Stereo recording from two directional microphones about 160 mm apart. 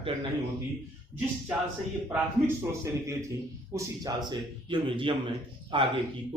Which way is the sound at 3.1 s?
20° right (ahead or behind).